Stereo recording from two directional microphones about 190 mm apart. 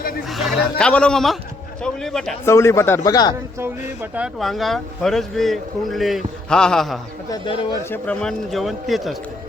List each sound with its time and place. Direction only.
0.3 s speech: centre (ahead or behind)
2.5 s speech: 15° left (ahead or behind)
3.6 s speech: 10° right (ahead or behind)
7.3 s speech: 25° left (ahead or behind)
7.9 s speech: 5° left (ahead or behind)